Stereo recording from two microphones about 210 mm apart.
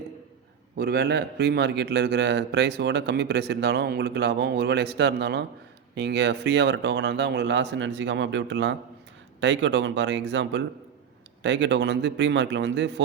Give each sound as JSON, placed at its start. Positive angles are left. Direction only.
{"t": 0.8, "sound": "a man's voice", "side_deg": -50}